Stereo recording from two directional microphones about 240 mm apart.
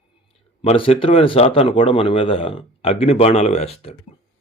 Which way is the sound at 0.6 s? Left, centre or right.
Left.